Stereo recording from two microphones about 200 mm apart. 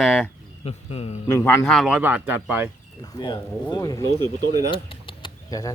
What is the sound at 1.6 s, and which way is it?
Speech, centre (ahead or behind).